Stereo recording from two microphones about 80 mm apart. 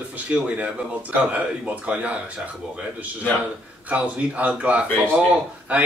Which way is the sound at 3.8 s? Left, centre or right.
Centre.